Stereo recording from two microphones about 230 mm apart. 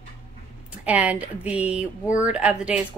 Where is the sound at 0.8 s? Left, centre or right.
Centre.